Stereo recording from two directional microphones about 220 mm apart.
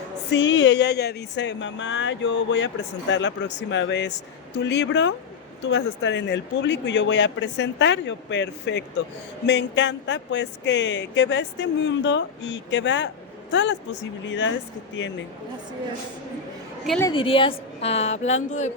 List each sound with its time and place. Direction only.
0.3 s speech: 55° left (ahead or behind)
17.0 s a woman's voice: 20° left (ahead or behind)